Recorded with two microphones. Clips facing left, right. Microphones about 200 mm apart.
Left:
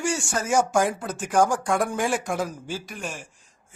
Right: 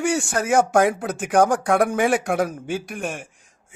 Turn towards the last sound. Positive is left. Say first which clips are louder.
# right 6 dB
turn(degrees=-55)  # may be behind; listen again after turning